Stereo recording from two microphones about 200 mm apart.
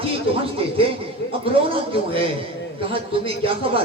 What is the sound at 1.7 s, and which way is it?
Speech, 25° right (ahead or behind).